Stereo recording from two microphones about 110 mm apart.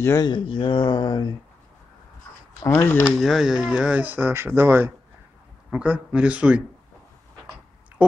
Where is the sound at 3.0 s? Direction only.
Centre (ahead or behind).